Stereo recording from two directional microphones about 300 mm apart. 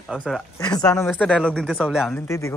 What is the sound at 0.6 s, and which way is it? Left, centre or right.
Speech, centre.